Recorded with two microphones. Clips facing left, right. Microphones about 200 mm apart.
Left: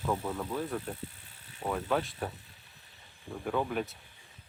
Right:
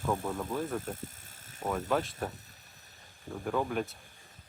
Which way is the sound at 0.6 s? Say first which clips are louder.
Right 1 dB; 45° right (ahead or behind).